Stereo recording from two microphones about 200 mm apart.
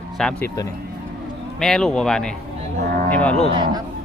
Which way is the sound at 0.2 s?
5° left (ahead or behind).